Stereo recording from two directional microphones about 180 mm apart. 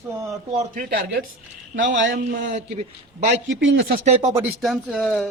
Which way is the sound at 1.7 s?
90° right.